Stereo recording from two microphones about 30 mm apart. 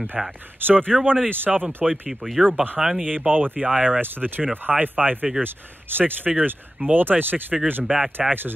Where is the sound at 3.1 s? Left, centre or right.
Right.